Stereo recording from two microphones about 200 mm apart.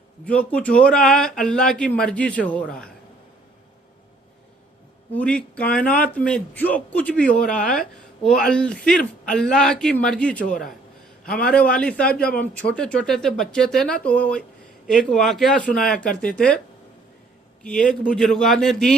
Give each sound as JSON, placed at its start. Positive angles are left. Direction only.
{"t": 0.3, "sound": "speech", "side_deg": 5}
{"t": 5.1, "sound": "speech", "side_deg": 5}
{"t": 10.4, "sound": "a man's voice", "side_deg": 45}
{"t": 11.4, "sound": "speech", "side_deg": 5}
{"t": 17.6, "sound": "speech", "side_deg": 5}